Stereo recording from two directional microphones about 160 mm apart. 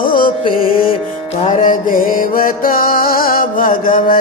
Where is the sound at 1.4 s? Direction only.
40° left (ahead or behind).